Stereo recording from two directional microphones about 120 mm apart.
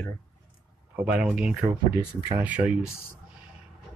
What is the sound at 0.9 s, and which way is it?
Speech, 10° right (ahead or behind).